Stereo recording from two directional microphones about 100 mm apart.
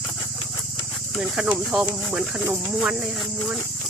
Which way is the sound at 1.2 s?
10° right (ahead or behind).